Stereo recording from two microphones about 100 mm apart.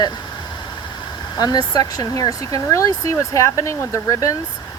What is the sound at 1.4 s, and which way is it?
Speech, 40° left (ahead or behind).